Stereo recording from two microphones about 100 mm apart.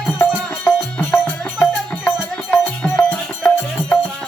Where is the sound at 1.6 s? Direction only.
15° left (ahead or behind).